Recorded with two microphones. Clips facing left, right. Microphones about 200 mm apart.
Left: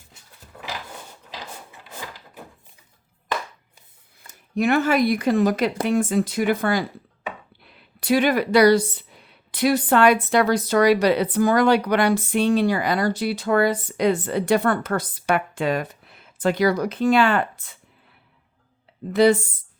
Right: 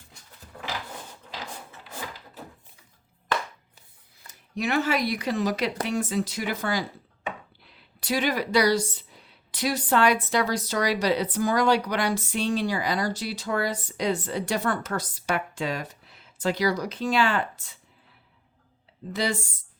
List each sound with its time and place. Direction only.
4.3 s speech: 55° left (ahead or behind)
19.1 s speech: 55° left (ahead or behind)